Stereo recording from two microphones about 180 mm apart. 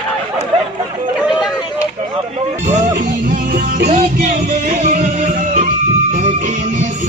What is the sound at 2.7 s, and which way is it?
Music, 45° right (ahead or behind).